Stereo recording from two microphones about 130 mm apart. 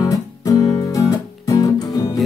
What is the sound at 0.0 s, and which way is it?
Music, 30° left (ahead or behind).